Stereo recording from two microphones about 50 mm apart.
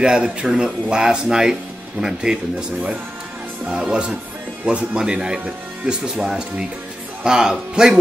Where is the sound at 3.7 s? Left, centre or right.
Centre.